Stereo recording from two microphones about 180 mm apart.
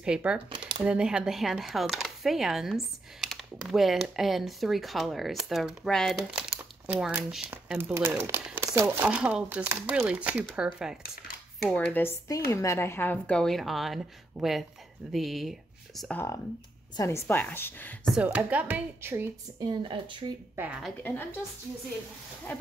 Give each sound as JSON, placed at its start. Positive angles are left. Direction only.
{"t": 0.0, "sound": "a woman's voice", "side_deg": -5}
{"t": 18.1, "sound": "speech", "side_deg": -10}
{"t": 19.7, "sound": "speech", "side_deg": -25}
{"t": 20.5, "sound": "a woman's voice", "side_deg": -10}
{"t": 21.0, "sound": "a woman's voice", "side_deg": 10}